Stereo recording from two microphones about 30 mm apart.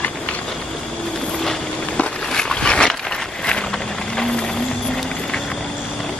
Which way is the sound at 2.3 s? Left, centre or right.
Left.